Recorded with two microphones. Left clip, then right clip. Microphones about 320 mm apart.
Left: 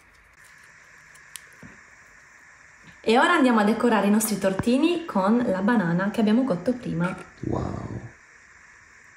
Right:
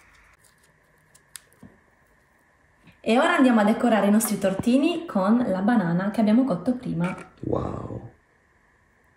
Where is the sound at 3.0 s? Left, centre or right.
Centre.